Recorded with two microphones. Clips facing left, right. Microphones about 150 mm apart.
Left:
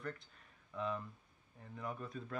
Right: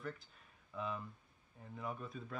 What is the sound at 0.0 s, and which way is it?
Speech, centre (ahead or behind).